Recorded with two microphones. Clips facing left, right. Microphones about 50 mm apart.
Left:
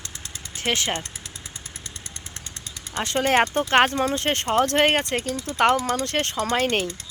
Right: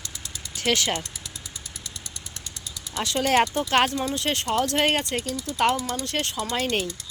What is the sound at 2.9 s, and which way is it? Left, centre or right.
Speech, left.